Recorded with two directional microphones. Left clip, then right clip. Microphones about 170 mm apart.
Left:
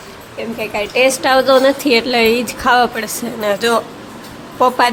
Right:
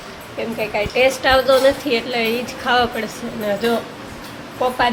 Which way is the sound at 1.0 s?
30° left (ahead or behind).